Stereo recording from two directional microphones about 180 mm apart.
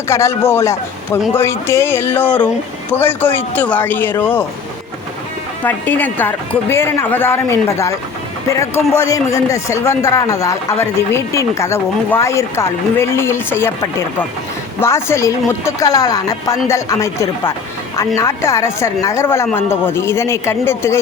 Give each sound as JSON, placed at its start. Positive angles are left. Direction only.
{"t": 0.1, "sound": "speech", "side_deg": 15}
{"t": 5.6, "sound": "speech", "side_deg": 10}
{"t": 14.8, "sound": "speech", "side_deg": 15}